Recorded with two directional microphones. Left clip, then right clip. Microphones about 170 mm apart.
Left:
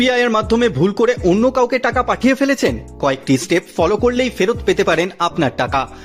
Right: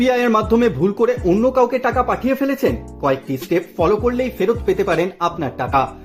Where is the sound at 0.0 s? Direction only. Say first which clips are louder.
Left 1 dB; 20° left (ahead or behind); by 4.1 s 35° left (ahead or behind).